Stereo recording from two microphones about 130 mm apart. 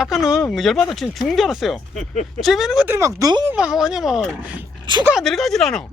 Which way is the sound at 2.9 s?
25° right (ahead or behind).